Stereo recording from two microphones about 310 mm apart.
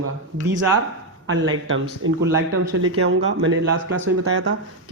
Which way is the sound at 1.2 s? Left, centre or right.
Right.